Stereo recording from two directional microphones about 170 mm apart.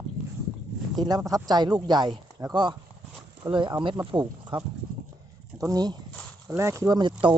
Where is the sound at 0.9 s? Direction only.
25° right (ahead or behind).